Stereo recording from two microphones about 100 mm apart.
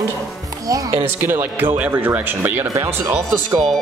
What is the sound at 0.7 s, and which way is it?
Speech, 35° right (ahead or behind).